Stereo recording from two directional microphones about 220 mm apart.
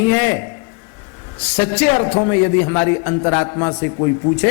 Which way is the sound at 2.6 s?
20° left (ahead or behind).